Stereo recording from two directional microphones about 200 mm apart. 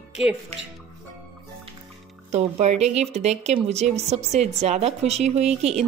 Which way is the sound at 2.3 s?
35° right (ahead or behind).